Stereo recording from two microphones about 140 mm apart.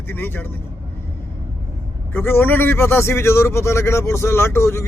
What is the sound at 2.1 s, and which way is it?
A man's voice, 15° left (ahead or behind).